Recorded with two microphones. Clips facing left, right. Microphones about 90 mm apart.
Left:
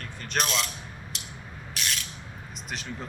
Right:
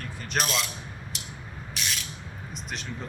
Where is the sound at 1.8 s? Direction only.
Centre (ahead or behind).